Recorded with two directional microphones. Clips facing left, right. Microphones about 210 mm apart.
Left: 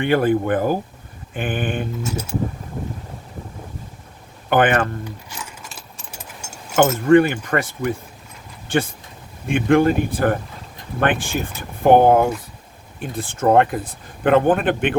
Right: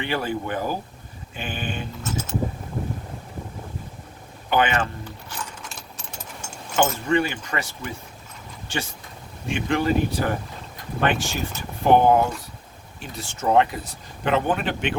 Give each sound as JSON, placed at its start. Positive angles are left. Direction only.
{"t": 0.0, "sound": "speech", "side_deg": 55}
{"t": 4.4, "sound": "speech", "side_deg": 55}
{"t": 5.3, "sound": "keys jangling", "side_deg": 5}
{"t": 7.0, "sound": "speech", "side_deg": 50}